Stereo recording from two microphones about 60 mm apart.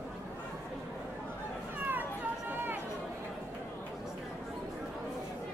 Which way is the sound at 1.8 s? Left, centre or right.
Right.